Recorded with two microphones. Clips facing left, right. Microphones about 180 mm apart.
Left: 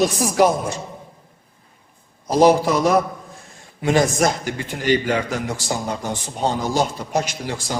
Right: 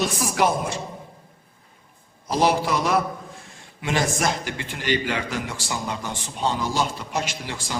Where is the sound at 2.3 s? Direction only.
45° left (ahead or behind).